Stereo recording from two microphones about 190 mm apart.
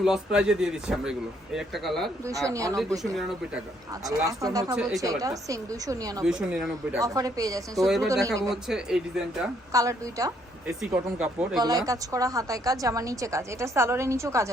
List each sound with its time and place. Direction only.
0.0 s a man's voice: 5° right (ahead or behind)
2.5 s a woman's voice: 15° right (ahead or behind)
3.0 s a man's voice: centre (ahead or behind)
4.3 s speech: 20° right (ahead or behind)
4.7 s a man's voice: centre (ahead or behind)
4.9 s a woman's voice: 20° right (ahead or behind)
6.2 s a man's voice: centre (ahead or behind)
6.9 s a woman's voice: 20° right (ahead or behind)
8.4 s a man's voice: 5° right (ahead or behind)
9.7 s a woman's voice: 15° right (ahead or behind)
10.7 s a man's voice: 5° right (ahead or behind)
11.6 s a woman's voice: 20° right (ahead or behind)